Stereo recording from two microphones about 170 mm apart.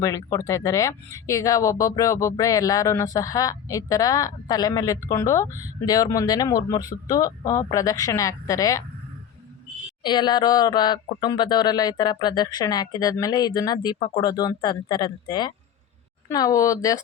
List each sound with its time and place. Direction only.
0.0 s speech: 20° left (ahead or behind)
10.0 s speech: 25° left (ahead or behind)